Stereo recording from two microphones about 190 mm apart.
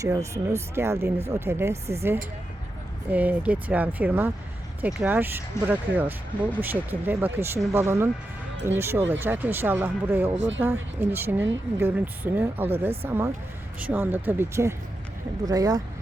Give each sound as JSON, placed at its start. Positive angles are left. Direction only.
{"t": 0.0, "sound": "speech", "side_deg": -15}
{"t": 1.7, "sound": "speech", "side_deg": -35}
{"t": 3.1, "sound": "speech", "side_deg": -10}
{"t": 10.3, "sound": "speech", "side_deg": -75}
{"t": 10.6, "sound": "speech", "side_deg": -10}